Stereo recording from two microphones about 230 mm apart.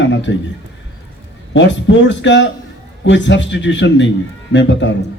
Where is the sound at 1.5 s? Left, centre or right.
Left.